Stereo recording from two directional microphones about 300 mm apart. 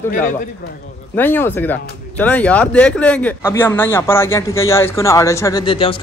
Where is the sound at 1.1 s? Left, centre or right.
Centre.